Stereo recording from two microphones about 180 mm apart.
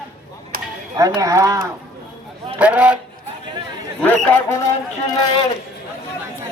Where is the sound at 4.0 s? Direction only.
10° left (ahead or behind).